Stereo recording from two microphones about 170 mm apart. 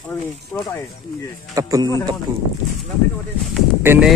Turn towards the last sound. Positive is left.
turn(degrees=-15)  # may be behind; listen again after turning